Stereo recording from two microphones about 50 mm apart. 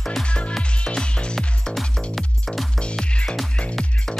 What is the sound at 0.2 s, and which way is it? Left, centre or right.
Music, left.